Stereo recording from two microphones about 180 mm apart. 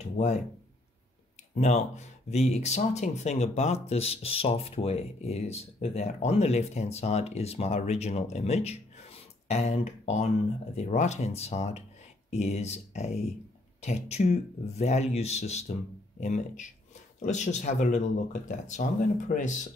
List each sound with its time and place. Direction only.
0.2 s speech: 40° left (ahead or behind)
1.5 s speech: 40° left (ahead or behind)